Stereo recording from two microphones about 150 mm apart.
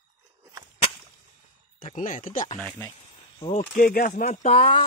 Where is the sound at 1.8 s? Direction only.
60° left (ahead or behind).